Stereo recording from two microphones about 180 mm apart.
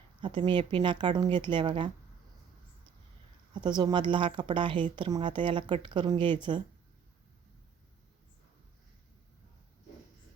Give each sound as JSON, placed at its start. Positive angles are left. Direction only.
{"t": 0.2, "sound": "speech", "side_deg": -25}
{"t": 3.5, "sound": "speech", "side_deg": -25}